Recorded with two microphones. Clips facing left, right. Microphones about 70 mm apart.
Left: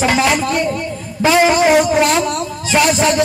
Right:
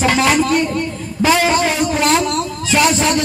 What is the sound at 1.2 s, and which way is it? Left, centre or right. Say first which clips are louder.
Speech: left 2 dB; centre.